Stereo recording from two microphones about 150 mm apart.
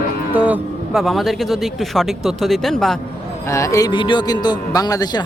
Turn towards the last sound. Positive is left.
turn(degrees=25)  # may be behind; listen again after turning